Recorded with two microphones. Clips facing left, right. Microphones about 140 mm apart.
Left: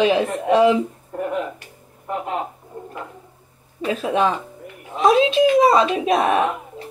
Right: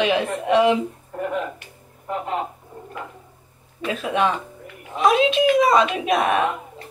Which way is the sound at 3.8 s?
30° left (ahead or behind).